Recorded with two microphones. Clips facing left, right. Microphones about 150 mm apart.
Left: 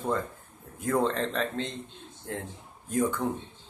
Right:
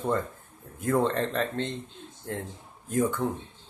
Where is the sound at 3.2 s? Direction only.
Centre (ahead or behind).